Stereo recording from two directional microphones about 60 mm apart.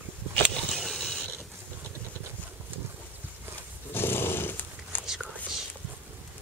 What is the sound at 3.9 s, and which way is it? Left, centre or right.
Roar, left.